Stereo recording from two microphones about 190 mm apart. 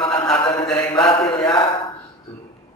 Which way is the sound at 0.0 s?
25° left (ahead or behind).